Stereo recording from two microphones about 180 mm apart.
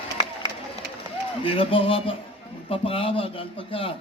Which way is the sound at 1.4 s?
30° left (ahead or behind).